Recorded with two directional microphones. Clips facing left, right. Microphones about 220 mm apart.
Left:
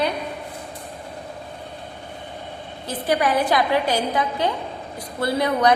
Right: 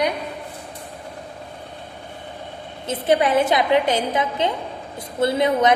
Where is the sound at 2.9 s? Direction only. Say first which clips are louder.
Right 3 dB; 25° right (ahead or behind).